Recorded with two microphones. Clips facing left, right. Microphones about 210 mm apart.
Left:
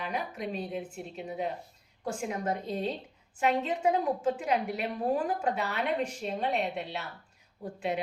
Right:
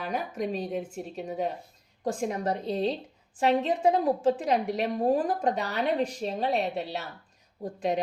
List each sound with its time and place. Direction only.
0.0 s a woman's voice: 45° right (ahead or behind)